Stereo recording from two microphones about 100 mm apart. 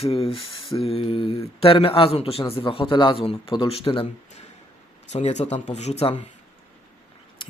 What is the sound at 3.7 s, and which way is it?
Speech, 75° left (ahead or behind).